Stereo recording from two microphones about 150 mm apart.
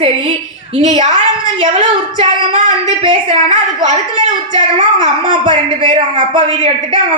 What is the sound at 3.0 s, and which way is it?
Speech, 35° right (ahead or behind).